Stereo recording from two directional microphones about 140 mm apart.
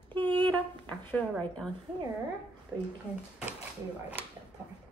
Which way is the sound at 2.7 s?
20° right (ahead or behind).